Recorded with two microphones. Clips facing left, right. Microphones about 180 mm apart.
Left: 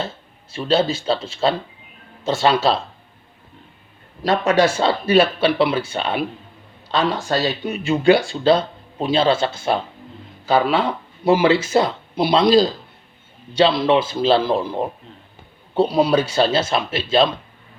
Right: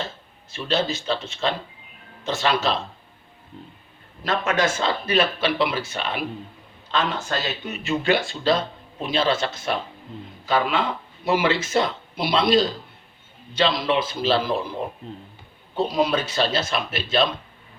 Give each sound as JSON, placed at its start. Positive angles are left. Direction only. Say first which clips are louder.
{"t": 0.5, "sound": "speech", "louder": "left 6 dB", "side_deg": 30}
{"t": 4.2, "sound": "speech", "louder": "left 6 dB", "side_deg": 35}
{"t": 11.3, "sound": "speech", "louder": "left 6 dB", "side_deg": 30}